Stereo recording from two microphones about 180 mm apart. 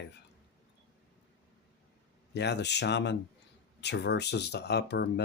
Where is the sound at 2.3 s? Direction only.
70° left (ahead or behind).